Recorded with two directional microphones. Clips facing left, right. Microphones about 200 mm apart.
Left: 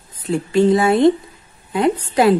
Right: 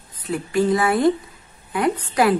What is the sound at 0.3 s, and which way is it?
A woman's voice, 25° left (ahead or behind).